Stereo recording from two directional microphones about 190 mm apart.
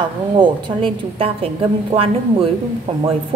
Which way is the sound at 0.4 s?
30° right (ahead or behind).